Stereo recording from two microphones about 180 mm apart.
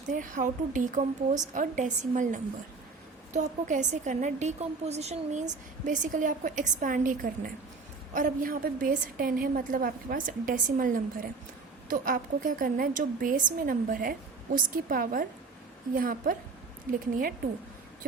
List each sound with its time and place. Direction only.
0.1 s a woman's voice: 45° right (ahead or behind)